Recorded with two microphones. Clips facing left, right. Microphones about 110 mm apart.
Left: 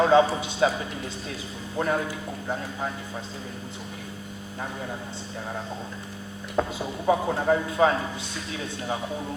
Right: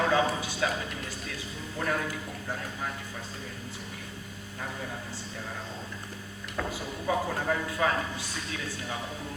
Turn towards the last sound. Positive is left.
turn(degrees=25)  # may be behind; listen again after turning